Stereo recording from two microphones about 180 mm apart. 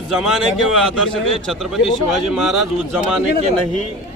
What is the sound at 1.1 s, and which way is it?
Speech, 30° left (ahead or behind).